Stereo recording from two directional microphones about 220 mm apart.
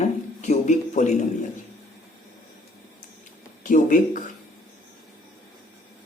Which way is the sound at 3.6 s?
35° left (ahead or behind).